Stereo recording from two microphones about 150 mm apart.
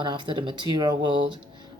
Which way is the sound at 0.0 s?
30° right (ahead or behind).